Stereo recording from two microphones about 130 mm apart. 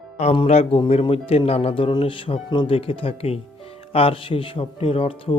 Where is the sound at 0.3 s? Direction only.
55° left (ahead or behind).